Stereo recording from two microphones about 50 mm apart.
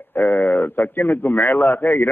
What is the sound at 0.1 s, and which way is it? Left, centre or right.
A man's voice, left.